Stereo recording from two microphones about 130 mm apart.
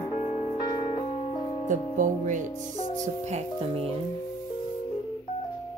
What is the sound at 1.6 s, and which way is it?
Music, 75° right (ahead or behind).